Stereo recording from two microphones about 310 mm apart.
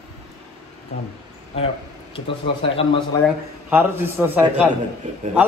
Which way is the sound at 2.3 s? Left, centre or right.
Centre.